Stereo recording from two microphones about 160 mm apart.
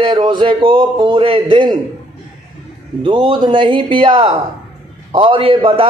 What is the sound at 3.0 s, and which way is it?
Speech, 30° right (ahead or behind).